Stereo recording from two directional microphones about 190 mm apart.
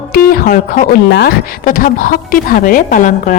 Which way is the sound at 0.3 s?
50° left (ahead or behind).